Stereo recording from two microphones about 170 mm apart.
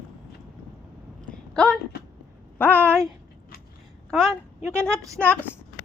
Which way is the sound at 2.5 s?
10° left (ahead or behind).